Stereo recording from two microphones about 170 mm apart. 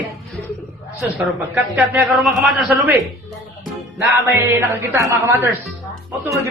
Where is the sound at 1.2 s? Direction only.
10° right (ahead or behind).